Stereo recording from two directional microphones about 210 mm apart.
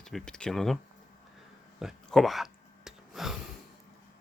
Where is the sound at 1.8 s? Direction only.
Centre (ahead or behind).